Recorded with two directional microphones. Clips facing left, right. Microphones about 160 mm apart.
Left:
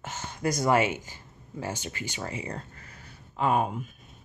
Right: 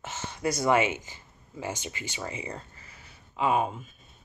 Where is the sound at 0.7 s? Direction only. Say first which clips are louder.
Even; 35° left (ahead or behind).